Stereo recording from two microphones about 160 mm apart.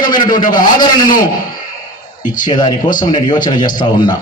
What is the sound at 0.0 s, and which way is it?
Speech, 25° left (ahead or behind).